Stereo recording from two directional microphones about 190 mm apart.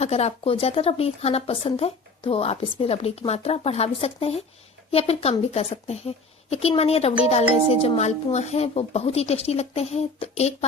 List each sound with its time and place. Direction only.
0.0 s a woman's voice: 35° left (ahead or behind)